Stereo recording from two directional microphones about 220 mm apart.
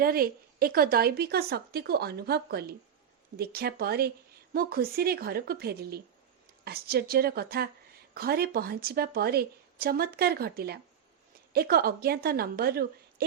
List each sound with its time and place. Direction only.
0.0 s speech: 40° right (ahead or behind)